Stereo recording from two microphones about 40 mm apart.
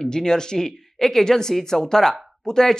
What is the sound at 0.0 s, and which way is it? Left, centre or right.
Speech, centre.